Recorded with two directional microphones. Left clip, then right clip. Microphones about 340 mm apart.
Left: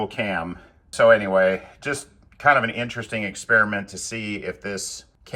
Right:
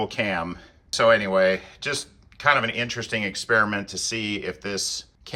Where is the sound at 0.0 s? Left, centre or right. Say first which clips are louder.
Even; centre.